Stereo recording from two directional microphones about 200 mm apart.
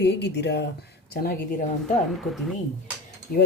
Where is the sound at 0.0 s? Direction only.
60° left (ahead or behind).